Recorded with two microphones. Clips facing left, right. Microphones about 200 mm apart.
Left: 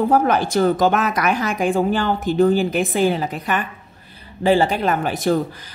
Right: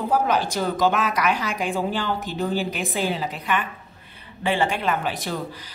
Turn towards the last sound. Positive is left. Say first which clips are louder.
# left 10 dB
turn(degrees=50)  # may be behind; listen again after turning